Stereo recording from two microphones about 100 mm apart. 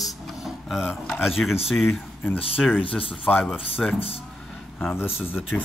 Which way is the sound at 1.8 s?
20° left (ahead or behind).